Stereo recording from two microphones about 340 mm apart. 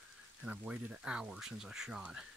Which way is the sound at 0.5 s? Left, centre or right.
Centre.